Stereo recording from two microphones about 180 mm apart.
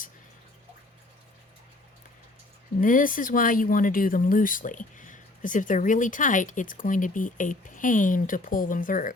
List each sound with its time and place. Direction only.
2.8 s speech: 50° left (ahead or behind)